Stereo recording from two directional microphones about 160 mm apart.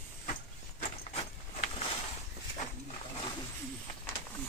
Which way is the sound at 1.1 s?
40° left (ahead or behind).